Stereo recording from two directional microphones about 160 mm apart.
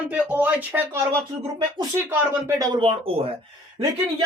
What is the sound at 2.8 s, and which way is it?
Speech, 35° right (ahead or behind).